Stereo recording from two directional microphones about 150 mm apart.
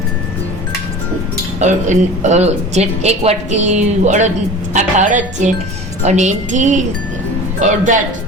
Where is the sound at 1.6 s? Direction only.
50° right (ahead or behind).